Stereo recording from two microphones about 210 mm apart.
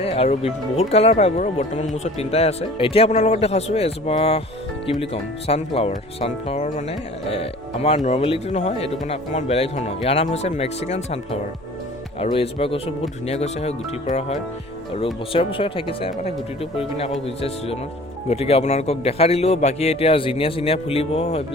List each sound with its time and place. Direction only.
0.0 s speech: 30° left (ahead or behind)